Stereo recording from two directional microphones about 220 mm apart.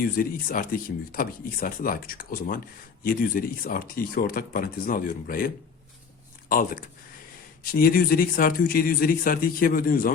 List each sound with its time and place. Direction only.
0.0 s speech: 40° left (ahead or behind)
6.5 s speech: 40° left (ahead or behind)